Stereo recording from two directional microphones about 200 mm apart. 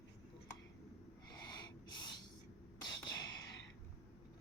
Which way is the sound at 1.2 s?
20° left (ahead or behind).